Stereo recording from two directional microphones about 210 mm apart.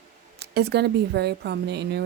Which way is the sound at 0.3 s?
50° right (ahead or behind).